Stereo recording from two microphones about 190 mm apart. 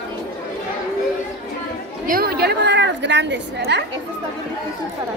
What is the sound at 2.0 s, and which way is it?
A woman's voice, 50° right (ahead or behind).